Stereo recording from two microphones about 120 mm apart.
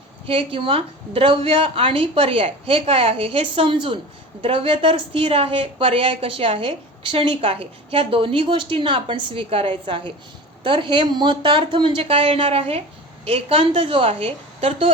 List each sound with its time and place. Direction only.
0.3 s a woman's voice: 50° right (ahead or behind)